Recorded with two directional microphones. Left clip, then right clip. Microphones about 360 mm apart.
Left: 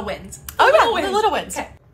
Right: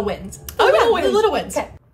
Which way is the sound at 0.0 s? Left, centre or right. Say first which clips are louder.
Right 4 dB; centre.